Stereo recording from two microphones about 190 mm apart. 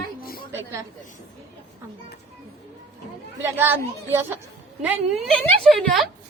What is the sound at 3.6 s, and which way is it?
A woman's voice, 10° right (ahead or behind).